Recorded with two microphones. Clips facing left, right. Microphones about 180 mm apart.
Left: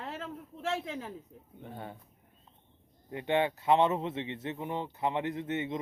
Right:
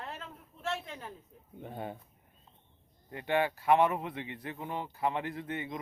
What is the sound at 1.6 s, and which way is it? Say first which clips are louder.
Speech: right 3 dB; 15° right (ahead or behind).